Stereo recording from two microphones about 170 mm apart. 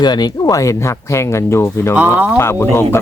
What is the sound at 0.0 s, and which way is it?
Speech, 25° left (ahead or behind).